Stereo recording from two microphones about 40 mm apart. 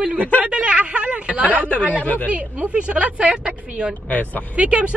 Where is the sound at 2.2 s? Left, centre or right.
Right.